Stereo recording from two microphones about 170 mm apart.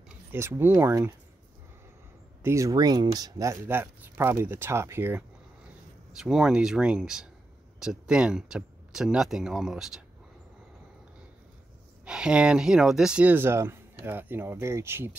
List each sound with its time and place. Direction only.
0.3 s speech: 15° right (ahead or behind)
2.4 s speech: 20° right (ahead or behind)
6.1 s speech: 5° right (ahead or behind)
12.0 s speech: 5° right (ahead or behind)